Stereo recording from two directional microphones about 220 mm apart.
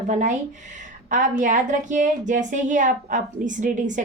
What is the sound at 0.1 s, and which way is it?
A woman's voice, 35° right (ahead or behind).